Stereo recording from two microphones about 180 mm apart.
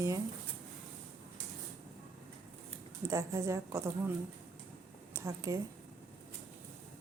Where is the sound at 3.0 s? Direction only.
15° right (ahead or behind).